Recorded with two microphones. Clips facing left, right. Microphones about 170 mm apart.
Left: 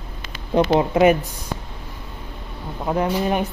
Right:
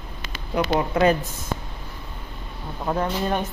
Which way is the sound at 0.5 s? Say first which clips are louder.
Left 5 dB; 20° left (ahead or behind).